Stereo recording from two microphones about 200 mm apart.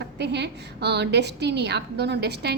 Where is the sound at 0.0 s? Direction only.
60° right (ahead or behind).